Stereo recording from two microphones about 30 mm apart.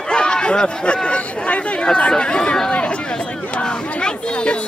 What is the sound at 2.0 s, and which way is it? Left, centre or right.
Speech, left.